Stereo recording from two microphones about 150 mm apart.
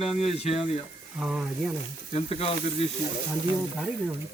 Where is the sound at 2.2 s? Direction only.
45° left (ahead or behind).